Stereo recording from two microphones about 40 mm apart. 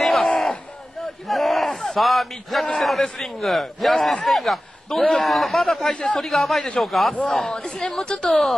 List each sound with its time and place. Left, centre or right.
0.0 s crowd: centre
1.2 s a man's voice: centre
8.0 s a woman's voice: left
8.3 s speech: centre